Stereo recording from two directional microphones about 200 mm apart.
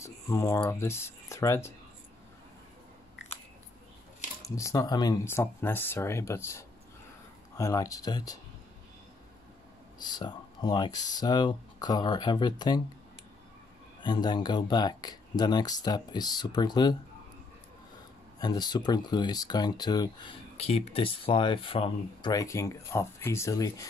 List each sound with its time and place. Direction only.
0.0 s speech: 15° left (ahead or behind)
4.5 s speech: 15° left (ahead or behind)
10.0 s speech: 20° left (ahead or behind)
14.0 s speech: 20° left (ahead or behind)
18.4 s speech: 20° left (ahead or behind)